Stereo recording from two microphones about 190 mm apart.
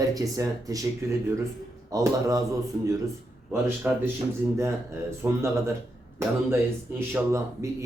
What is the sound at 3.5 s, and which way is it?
Speech, 10° right (ahead or behind).